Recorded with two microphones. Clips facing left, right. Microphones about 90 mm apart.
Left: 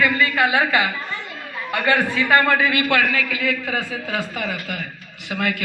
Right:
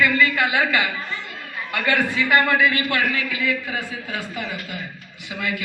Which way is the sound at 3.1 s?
90° left.